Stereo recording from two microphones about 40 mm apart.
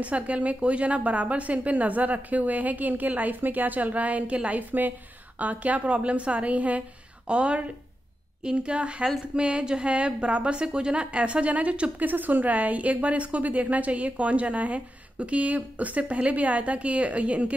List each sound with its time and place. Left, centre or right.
0.0 s a woman's voice: right
12.0 s a woman's voice: right